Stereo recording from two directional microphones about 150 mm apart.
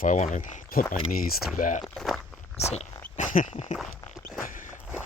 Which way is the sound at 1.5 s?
60° left (ahead or behind).